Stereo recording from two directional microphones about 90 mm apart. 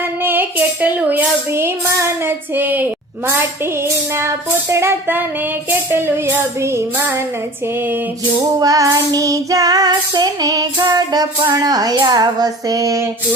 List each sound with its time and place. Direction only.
0.2 s a sound: 20° right (ahead or behind)
3.8 s music: 30° right (ahead or behind)
5.9 s female singing: 25° right (ahead or behind)
8.5 s child singing: 40° right (ahead or behind)